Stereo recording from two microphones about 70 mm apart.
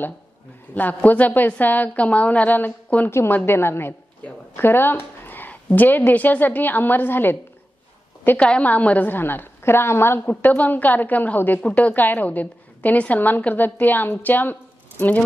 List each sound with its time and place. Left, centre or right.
0.7 s a woman's voice: left
3.1 s a woman's voice: left
8.4 s a woman's voice: centre; by 10.3 s left
10.4 s a woman's voice: left